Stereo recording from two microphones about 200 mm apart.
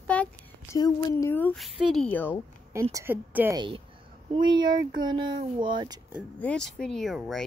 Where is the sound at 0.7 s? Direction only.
15° left (ahead or behind).